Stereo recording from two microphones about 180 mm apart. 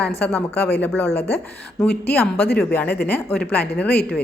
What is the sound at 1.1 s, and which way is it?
Speech, 65° left (ahead or behind).